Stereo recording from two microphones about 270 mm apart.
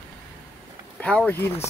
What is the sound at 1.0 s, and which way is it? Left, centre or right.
Speech, centre.